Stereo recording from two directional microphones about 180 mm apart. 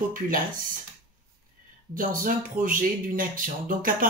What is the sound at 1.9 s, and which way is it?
Speech, 50° right (ahead or behind).